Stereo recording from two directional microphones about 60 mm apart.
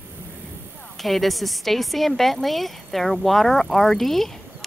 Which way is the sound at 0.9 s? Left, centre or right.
Centre.